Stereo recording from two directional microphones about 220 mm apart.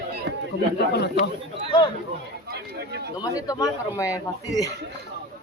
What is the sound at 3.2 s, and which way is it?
A man's voice, 15° left (ahead or behind).